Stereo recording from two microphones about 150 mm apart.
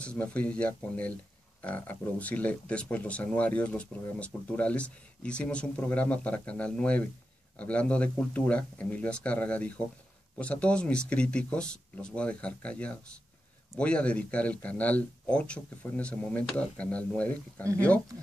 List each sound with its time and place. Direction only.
0.0 s speech: 10° left (ahead or behind)